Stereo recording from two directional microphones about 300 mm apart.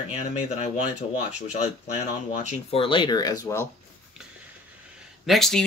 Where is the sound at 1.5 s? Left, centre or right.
Left.